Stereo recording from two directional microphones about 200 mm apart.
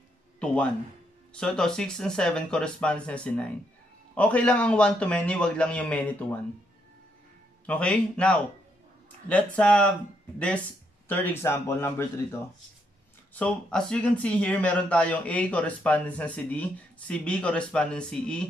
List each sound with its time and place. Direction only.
0.4 s a man's voice: 5° left (ahead or behind)
7.6 s a man's voice: 5° left (ahead or behind)
11.1 s speech: 10° left (ahead or behind)